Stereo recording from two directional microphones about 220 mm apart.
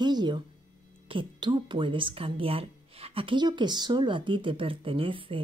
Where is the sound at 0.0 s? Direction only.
20° right (ahead or behind).